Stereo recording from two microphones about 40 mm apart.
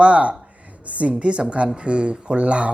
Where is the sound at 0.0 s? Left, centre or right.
Right.